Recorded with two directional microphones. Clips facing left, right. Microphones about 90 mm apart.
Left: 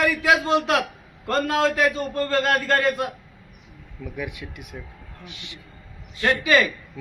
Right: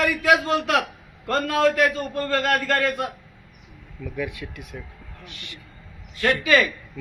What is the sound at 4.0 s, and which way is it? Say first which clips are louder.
A man's voice: right 2 dB; 15° left (ahead or behind).